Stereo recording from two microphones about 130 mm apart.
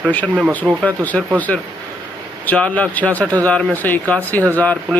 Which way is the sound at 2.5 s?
10° left (ahead or behind).